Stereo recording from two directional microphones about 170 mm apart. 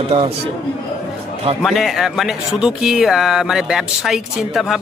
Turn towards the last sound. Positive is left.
turn(degrees=0)  # may be behind; listen again after turning